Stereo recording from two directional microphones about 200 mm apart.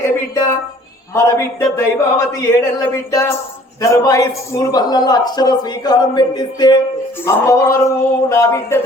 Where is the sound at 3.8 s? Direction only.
15° left (ahead or behind).